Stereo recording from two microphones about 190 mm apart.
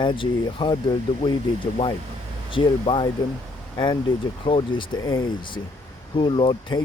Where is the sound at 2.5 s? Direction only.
25° left (ahead or behind).